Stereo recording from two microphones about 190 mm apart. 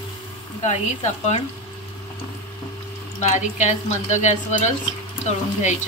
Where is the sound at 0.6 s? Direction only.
35° left (ahead or behind).